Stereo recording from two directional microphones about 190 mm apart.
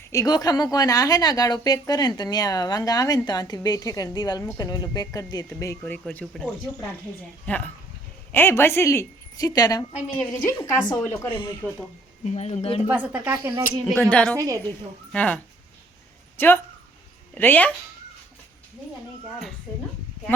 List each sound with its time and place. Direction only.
0.1 s a woman's voice: 20° left (ahead or behind)
7.4 s a woman's voice: 5° left (ahead or behind)
12.2 s speech: 35° left (ahead or behind)
12.9 s speech: 10° right (ahead or behind)
13.9 s a woman's voice: 5° left (ahead or behind)
14.3 s speech: 15° right (ahead or behind)
15.1 s speech: 5° left (ahead or behind)
16.4 s a woman's voice: 10° left (ahead or behind)